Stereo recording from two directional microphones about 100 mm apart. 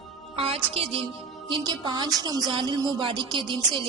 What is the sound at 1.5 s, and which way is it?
A woman's voice, 50° right (ahead or behind).